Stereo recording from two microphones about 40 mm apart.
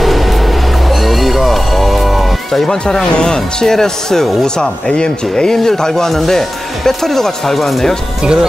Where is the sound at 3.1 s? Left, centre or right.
Left; by 7.9 s centre.